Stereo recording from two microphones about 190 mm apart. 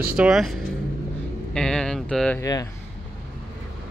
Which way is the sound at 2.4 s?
20° left (ahead or behind).